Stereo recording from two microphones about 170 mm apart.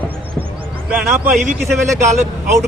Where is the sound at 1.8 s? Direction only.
15° right (ahead or behind).